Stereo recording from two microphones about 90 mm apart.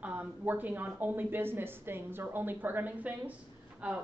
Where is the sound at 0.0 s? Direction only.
15° right (ahead or behind).